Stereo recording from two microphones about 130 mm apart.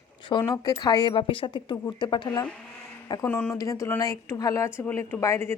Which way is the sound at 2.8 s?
30° left (ahead or behind).